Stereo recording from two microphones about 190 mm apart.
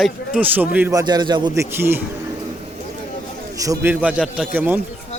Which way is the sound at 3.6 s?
15° right (ahead or behind).